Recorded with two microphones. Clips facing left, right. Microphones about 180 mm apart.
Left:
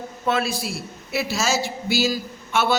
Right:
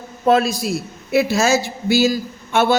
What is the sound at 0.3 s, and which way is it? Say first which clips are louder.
A man's voice: right 8 dB; 40° right (ahead or behind).